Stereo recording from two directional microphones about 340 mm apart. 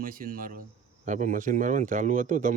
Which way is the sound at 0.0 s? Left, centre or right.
Right.